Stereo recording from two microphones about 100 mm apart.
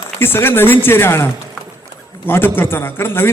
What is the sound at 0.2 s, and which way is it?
A man's voice, 25° left (ahead or behind).